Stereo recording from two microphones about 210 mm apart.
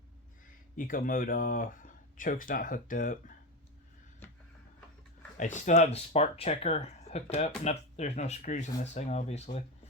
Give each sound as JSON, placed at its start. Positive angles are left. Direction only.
{"t": 0.8, "sound": "speech", "side_deg": 40}
{"t": 4.2, "sound": "a sound", "side_deg": 10}
{"t": 5.4, "sound": "speech", "side_deg": 35}